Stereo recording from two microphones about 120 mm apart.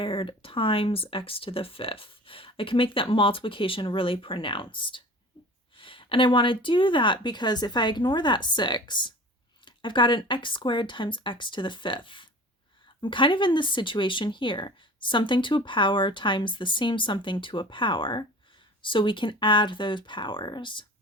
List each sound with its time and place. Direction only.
0.0 s speech: 50° left (ahead or behind)